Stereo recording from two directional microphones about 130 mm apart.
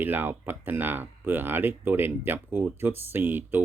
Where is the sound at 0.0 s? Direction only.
15° right (ahead or behind).